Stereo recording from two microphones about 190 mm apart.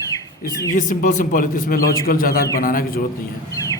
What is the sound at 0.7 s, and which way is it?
A man's voice, 45° left (ahead or behind).